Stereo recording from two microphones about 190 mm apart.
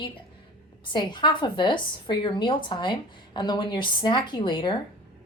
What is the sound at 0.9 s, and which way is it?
A woman's voice, 25° left (ahead or behind).